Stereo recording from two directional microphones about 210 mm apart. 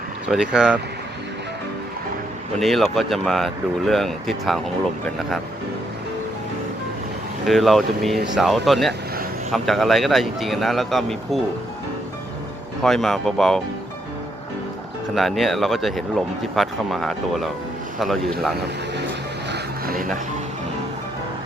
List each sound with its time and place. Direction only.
0.3 s speech: 5° right (ahead or behind)
2.6 s speech: centre (ahead or behind)
7.4 s speech: centre (ahead or behind)
12.8 s speech: centre (ahead or behind)
15.1 s speech: centre (ahead or behind)
19.5 s music: 50° right (ahead or behind)